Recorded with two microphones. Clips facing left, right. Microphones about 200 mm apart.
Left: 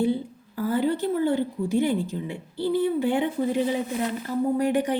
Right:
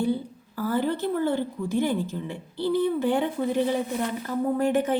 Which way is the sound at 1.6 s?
15° left (ahead or behind).